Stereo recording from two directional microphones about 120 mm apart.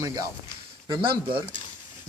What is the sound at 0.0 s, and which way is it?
Speech, 30° right (ahead or behind).